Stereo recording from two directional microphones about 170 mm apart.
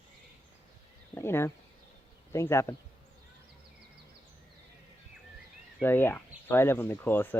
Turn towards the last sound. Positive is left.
turn(degrees=10)  # may be behind; listen again after turning